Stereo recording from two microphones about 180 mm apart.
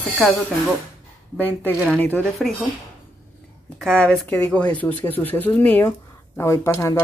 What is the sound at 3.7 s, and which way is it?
Speech, 5° left (ahead or behind).